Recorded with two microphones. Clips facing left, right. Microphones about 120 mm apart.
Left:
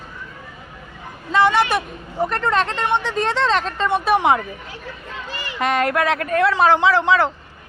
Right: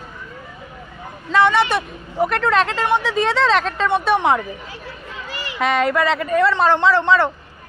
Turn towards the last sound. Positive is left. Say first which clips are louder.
# right 1 dB
turn(degrees=0)  # may be behind; listen again after turning